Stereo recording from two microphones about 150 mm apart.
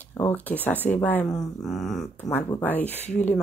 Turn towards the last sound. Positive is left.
turn(degrees=10)  # may be behind; listen again after turning